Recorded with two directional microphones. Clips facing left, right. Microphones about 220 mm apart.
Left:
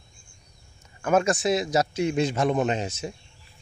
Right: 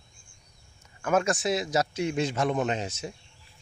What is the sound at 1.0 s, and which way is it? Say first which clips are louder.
A man's voice: left 3 dB; 30° left (ahead or behind).